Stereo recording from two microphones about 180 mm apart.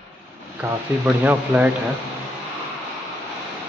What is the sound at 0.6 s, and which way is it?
Speech, 10° right (ahead or behind).